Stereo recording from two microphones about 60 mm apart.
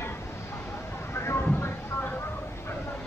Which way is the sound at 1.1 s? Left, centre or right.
Left.